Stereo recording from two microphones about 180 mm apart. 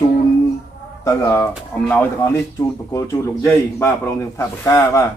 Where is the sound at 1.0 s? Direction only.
15° left (ahead or behind).